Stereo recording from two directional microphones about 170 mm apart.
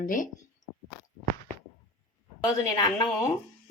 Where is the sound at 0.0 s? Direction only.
50° left (ahead or behind).